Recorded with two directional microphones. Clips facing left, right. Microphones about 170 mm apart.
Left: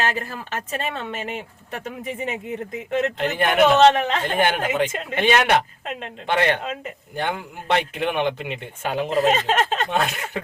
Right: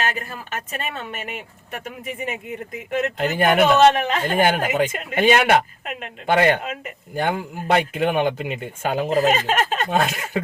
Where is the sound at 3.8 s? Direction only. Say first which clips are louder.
Even; 25° left (ahead or behind).